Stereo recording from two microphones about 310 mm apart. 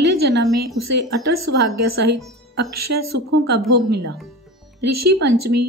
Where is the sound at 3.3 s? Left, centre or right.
Right.